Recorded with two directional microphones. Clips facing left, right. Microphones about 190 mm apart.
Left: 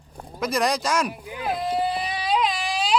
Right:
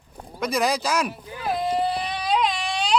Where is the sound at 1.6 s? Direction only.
Centre (ahead or behind).